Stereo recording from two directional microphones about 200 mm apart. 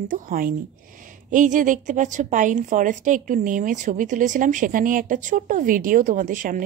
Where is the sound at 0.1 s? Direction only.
45° right (ahead or behind).